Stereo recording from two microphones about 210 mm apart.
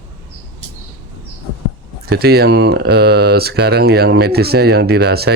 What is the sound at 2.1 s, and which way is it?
Speech, 50° right (ahead or behind).